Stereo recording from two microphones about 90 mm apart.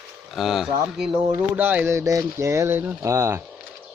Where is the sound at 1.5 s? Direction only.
20° right (ahead or behind).